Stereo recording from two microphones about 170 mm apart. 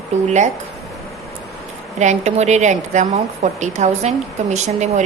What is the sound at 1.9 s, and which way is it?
A woman's voice, 45° right (ahead or behind).